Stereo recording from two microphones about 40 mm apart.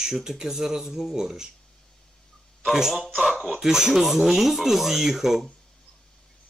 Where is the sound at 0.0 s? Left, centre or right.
Centre.